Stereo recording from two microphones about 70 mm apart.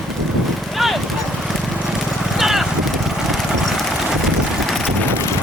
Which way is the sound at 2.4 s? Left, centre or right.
Centre.